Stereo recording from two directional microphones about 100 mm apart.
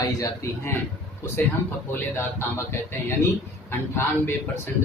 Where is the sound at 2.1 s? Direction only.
25° left (ahead or behind).